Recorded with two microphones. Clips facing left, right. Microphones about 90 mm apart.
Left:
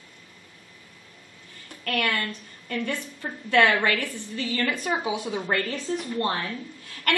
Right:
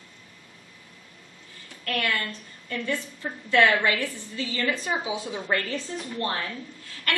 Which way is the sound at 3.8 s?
55° left (ahead or behind).